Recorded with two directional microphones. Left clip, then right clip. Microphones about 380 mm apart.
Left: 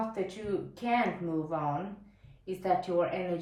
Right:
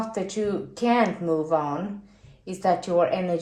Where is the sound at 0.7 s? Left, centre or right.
Centre.